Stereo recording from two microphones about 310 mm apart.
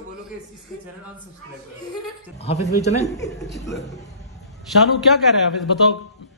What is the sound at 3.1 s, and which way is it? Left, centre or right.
Speech, centre.